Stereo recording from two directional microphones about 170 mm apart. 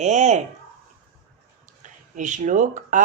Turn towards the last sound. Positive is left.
turn(degrees=-50)  # may be behind; listen again after turning